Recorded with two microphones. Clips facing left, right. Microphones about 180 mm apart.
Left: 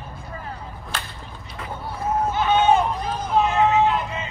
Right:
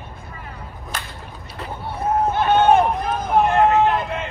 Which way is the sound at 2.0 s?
55° right (ahead or behind).